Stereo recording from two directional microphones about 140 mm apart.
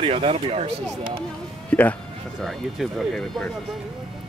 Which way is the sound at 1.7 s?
10° left (ahead or behind).